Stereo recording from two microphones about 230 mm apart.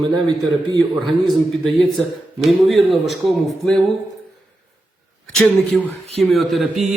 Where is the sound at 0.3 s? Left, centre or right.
Centre.